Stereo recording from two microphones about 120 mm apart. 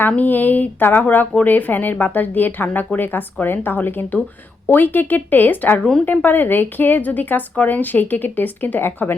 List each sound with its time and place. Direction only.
0.1 s speech: 15° left (ahead or behind)